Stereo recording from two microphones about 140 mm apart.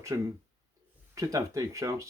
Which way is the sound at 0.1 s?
20° right (ahead or behind).